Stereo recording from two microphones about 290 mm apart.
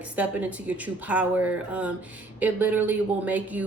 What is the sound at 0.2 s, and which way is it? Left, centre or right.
Speech, centre.